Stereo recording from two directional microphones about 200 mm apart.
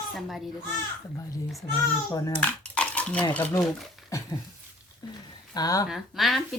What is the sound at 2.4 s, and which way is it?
Cutlery, 5° left (ahead or behind).